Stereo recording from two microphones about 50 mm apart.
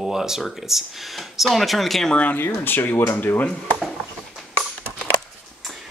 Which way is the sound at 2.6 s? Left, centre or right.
Left.